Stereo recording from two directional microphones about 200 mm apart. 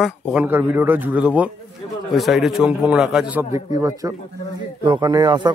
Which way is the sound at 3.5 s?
15° right (ahead or behind).